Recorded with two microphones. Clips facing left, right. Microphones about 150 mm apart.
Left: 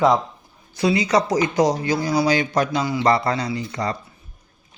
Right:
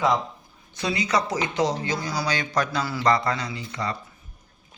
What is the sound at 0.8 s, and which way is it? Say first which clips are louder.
A man's voice: left 6 dB; 30° left (ahead or behind).